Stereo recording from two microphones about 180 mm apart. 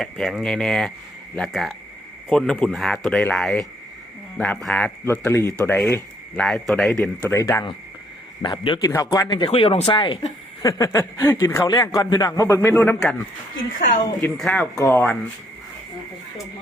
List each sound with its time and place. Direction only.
0.0 s a man's voice: centre (ahead or behind)
7.3 s a man's voice: 10° left (ahead or behind)
8.4 s a man's voice: 25° left (ahead or behind); by 13.1 s 10° left (ahead or behind)
14.2 s a man's voice: 5° left (ahead or behind)